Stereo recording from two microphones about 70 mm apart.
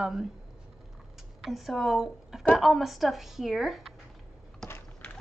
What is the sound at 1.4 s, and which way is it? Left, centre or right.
A woman's voice, centre.